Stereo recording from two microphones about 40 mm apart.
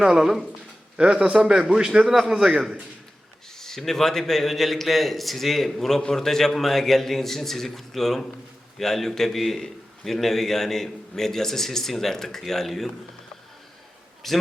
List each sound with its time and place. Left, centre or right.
0.0 s a man's voice: centre
0.9 s a man's voice: right
3.6 s a man's voice: centre
14.2 s a man's voice: centre